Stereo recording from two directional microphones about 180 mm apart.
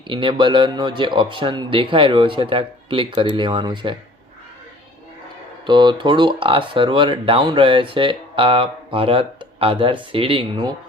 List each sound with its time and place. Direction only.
0.1 s speech: 25° right (ahead or behind)
5.6 s speech: 25° right (ahead or behind)